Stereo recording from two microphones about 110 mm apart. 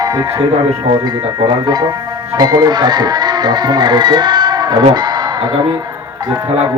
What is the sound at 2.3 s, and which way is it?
Speech, 35° right (ahead or behind).